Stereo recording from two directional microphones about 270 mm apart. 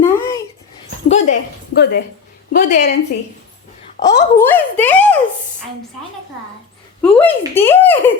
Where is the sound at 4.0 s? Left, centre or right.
Centre.